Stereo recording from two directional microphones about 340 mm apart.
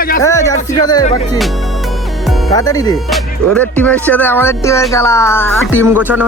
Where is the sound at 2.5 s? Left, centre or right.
Centre.